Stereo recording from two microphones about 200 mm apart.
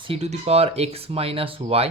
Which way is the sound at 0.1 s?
30° right (ahead or behind).